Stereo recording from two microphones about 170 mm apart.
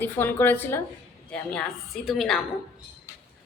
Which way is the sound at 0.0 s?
10° left (ahead or behind).